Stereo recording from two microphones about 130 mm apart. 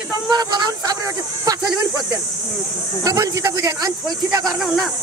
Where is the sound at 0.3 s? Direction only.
35° right (ahead or behind).